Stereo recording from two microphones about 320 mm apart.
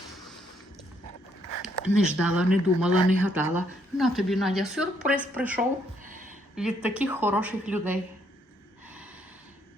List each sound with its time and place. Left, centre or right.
1.6 s speech: centre